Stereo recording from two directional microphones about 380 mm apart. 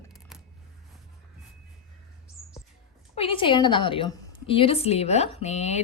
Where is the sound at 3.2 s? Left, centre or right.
Centre.